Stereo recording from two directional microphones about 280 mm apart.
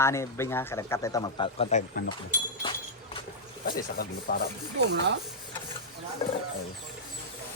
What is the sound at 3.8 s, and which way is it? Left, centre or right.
Speech, left.